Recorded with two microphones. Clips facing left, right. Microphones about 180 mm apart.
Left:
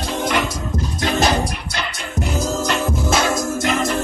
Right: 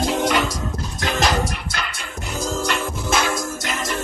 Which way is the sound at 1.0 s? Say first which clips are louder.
Left 2 dB; 25° left (ahead or behind).